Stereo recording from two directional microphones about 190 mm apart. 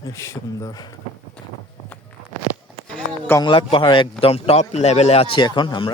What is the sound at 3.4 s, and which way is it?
A man's voice, 25° left (ahead or behind).